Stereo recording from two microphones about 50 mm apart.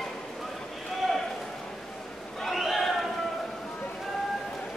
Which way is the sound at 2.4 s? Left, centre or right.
Centre.